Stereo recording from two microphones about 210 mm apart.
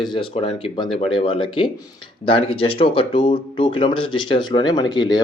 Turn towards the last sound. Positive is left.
turn(degrees=20)  # may be behind; listen again after turning